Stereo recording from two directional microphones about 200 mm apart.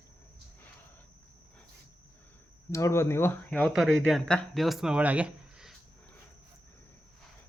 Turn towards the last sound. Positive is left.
turn(degrees=-5)  # may be behind; listen again after turning